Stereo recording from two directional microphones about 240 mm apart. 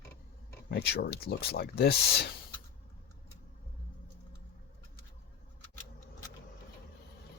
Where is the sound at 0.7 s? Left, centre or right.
Left.